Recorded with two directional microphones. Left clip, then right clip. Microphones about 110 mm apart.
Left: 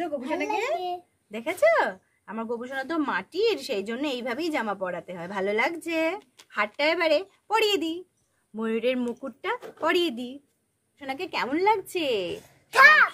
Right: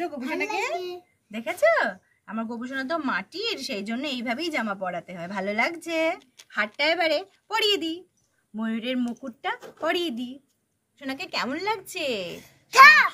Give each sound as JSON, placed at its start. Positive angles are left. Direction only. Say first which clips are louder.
{"t": 0.3, "sound": "a woman's voice", "louder": "even", "side_deg": 10}
{"t": 0.7, "sound": "a child's voice", "louder": "left 2 dB", "side_deg": -5}
{"t": 1.3, "sound": "a woman's voice", "louder": "even", "side_deg": 20}
{"t": 11.0, "sound": "speech", "louder": "even", "side_deg": 20}
{"t": 12.7, "sound": "a child's voice", "louder": "right 3 dB", "side_deg": 0}